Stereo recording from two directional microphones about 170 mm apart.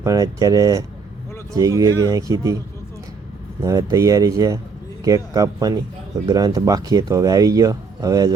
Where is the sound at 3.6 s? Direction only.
20° right (ahead or behind).